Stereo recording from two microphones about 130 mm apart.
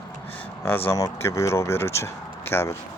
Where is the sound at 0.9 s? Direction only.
25° left (ahead or behind).